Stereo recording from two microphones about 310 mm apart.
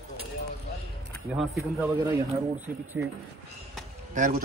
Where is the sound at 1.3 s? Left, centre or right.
Centre.